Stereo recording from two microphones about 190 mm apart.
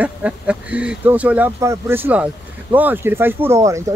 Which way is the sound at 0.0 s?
5° right (ahead or behind).